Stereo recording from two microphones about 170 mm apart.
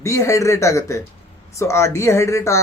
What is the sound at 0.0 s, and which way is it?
A man's voice, 15° left (ahead or behind).